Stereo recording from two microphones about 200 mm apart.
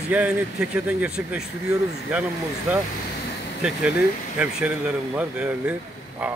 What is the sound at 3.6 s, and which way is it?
Speech, 5° right (ahead or behind).